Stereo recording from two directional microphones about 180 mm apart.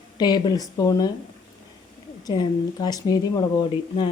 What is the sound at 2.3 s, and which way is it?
A woman's voice, 25° left (ahead or behind).